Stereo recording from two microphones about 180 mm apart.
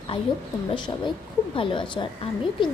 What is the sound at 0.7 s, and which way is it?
A woman's voice, 25° left (ahead or behind).